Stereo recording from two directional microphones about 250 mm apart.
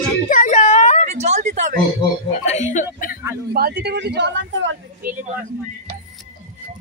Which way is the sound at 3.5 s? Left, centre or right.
Right.